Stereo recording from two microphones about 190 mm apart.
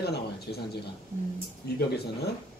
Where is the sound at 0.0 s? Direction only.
60° left (ahead or behind).